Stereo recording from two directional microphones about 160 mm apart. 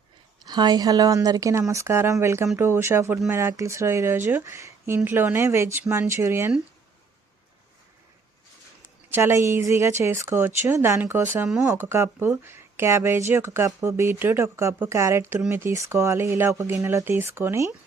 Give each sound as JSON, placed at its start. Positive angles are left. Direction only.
{"t": 0.4, "sound": "speech", "side_deg": -25}
{"t": 9.0, "sound": "speech", "side_deg": -15}